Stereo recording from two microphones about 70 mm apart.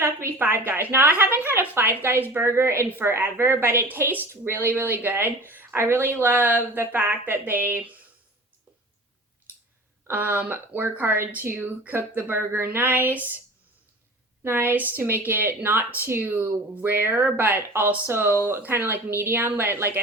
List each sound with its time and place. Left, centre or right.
0.0 s a woman's voice: right
10.1 s a woman's voice: right
14.4 s a woman's voice: right